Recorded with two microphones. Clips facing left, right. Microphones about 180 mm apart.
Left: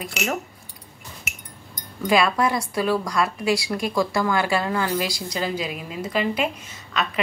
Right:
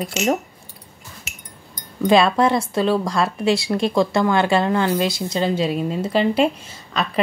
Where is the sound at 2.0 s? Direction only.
25° right (ahead or behind).